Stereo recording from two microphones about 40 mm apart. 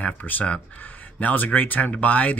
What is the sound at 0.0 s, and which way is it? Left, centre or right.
Speech, left.